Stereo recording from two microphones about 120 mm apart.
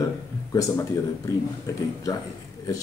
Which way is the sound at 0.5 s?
25° left (ahead or behind).